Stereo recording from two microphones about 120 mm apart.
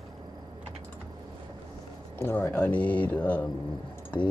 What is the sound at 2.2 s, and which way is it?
Speech, 20° left (ahead or behind).